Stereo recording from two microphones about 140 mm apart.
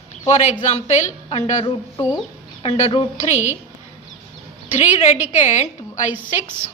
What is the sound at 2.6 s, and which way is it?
Speech, 45° left (ahead or behind).